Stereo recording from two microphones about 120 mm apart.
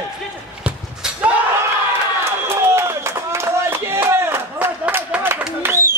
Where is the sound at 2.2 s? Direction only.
25° right (ahead or behind).